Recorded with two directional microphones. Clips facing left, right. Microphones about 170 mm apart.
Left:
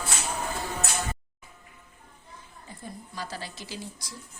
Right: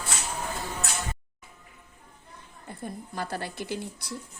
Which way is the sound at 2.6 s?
55° right (ahead or behind).